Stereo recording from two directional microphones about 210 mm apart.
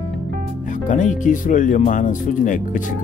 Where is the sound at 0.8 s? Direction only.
35° left (ahead or behind).